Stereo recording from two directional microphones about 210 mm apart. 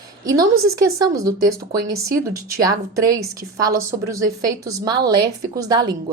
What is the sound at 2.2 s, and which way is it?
A woman's voice, 15° right (ahead or behind).